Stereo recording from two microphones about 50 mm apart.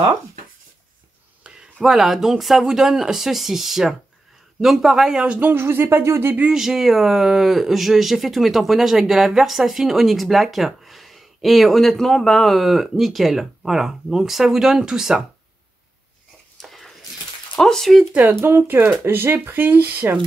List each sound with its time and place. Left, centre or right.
1.8 s speech: centre
5.4 s speech: right
6.5 s speech: centre
16.5 s a sound: centre
17.6 s speech: centre
18.3 s speech: right